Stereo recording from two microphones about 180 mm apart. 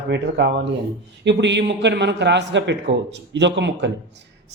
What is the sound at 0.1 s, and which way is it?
Speech, 65° right (ahead or behind).